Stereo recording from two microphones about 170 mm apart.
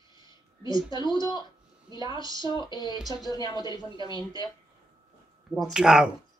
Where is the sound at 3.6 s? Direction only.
25° right (ahead or behind).